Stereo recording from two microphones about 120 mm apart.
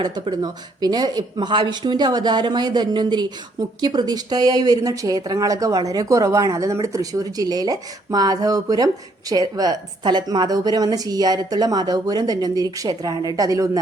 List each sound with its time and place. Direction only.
0.0 s speech: 35° right (ahead or behind)